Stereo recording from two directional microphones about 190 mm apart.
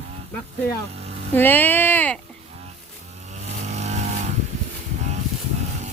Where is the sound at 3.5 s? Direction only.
35° right (ahead or behind).